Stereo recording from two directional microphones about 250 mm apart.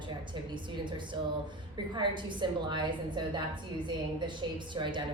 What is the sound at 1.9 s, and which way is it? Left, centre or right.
A woman's voice, centre.